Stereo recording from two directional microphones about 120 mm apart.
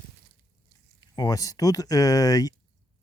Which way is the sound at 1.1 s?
35° left (ahead or behind).